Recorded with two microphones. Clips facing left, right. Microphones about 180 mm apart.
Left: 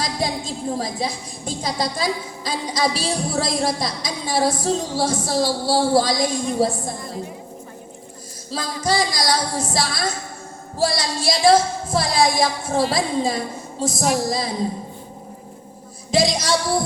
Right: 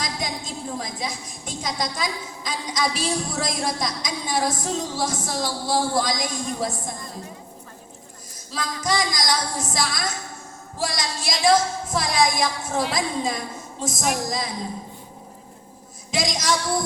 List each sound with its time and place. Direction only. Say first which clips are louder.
0.0 s a woman's voice: left 5 dB; 30° left (ahead or behind)
8.4 s a woman's voice: left 3 dB; 30° left (ahead or behind)
16.1 s a woman's voice: left 5 dB; 30° left (ahead or behind)